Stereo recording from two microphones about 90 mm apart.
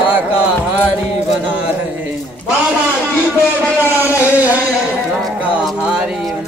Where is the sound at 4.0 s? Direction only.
20° right (ahead or behind).